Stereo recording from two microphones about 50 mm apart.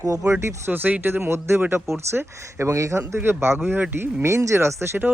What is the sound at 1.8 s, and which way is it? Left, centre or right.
Speech, right.